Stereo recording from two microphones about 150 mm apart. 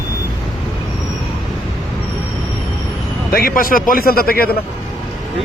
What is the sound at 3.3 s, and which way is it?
A man's voice, 80° left.